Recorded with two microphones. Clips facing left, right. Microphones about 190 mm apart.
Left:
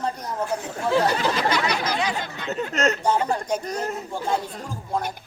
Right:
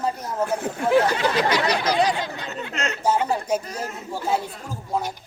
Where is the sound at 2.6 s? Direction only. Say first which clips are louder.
Left 7 dB; 40° left (ahead or behind).